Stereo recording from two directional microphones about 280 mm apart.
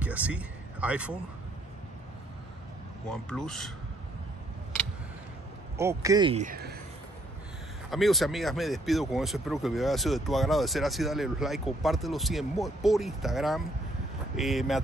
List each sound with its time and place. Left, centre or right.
0.0 s speech: centre
3.1 s speech: centre
5.8 s speech: centre; by 6.8 s right
7.9 s speech: centre